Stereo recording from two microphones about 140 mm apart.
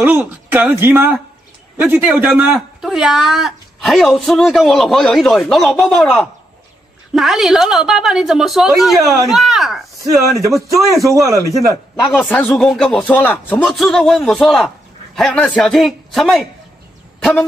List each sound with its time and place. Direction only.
0.0 s speech: 15° right (ahead or behind)
10.7 s a man's voice: 25° right (ahead or behind)
11.5 s speech: centre (ahead or behind)